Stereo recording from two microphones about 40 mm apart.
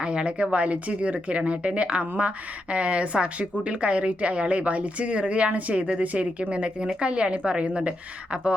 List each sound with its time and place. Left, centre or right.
0.0 s a woman's voice: right